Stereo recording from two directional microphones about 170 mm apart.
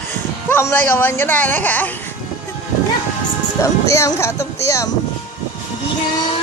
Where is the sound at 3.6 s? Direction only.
15° left (ahead or behind).